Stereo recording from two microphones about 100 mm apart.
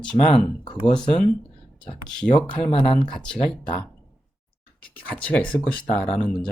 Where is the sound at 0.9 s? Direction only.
5° left (ahead or behind).